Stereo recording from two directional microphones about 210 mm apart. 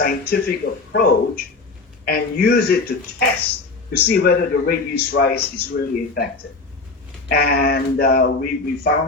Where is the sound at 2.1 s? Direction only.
50° left (ahead or behind).